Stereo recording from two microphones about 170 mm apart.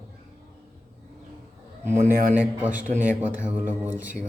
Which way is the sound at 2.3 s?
10° right (ahead or behind).